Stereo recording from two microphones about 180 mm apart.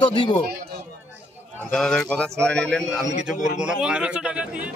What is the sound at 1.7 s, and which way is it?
Speech, 5° left (ahead or behind).